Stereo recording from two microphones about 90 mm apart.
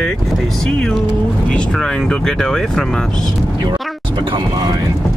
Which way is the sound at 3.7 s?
60° right (ahead or behind).